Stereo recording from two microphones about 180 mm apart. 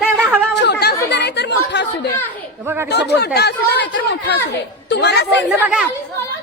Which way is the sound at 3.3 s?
65° left (ahead or behind).